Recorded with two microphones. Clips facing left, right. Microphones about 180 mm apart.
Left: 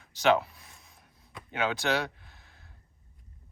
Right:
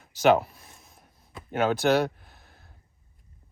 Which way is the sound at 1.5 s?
45° right (ahead or behind).